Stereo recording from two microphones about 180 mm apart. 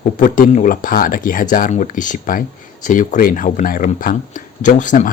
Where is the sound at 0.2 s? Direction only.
50° left (ahead or behind).